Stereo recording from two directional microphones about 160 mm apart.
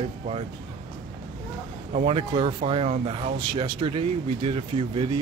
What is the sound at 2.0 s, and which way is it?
Speech, 35° right (ahead or behind).